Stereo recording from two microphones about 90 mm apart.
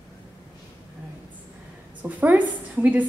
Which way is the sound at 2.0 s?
20° right (ahead or behind).